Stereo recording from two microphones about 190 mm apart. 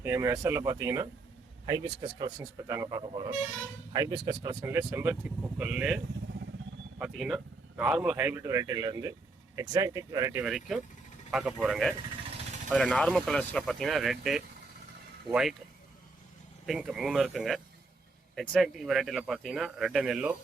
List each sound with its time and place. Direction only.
0.0 s speech: 15° right (ahead or behind)
7.0 s speech: centre (ahead or behind); by 10.4 s 15° right (ahead or behind)
10.4 s speech: centre (ahead or behind)
16.6 s speech: centre (ahead or behind)